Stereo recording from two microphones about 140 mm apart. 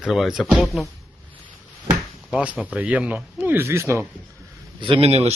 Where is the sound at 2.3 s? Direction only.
5° right (ahead or behind).